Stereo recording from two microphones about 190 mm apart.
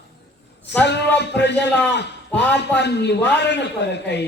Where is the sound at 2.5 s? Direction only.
65° left (ahead or behind).